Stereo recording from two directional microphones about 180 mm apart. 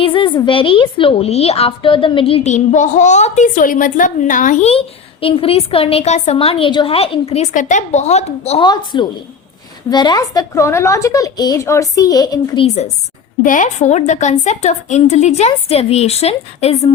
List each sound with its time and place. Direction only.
0.0 s a woman's voice: 30° left (ahead or behind)
8.6 s a woman's voice: 25° left (ahead or behind)
12.6 s a woman's voice: 40° left (ahead or behind)